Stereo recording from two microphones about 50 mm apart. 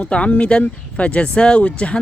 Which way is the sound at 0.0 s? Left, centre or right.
Left.